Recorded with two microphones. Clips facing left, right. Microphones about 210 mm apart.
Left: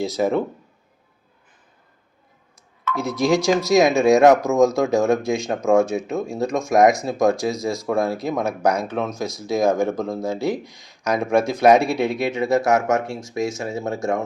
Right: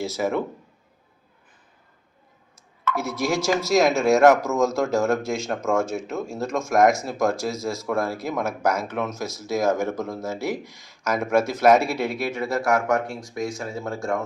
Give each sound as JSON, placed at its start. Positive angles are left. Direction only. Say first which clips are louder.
{"t": 0.0, "sound": "speech", "louder": "left 4 dB", "side_deg": 15}
{"t": 2.9, "sound": "speech", "louder": "left 5 dB", "side_deg": 15}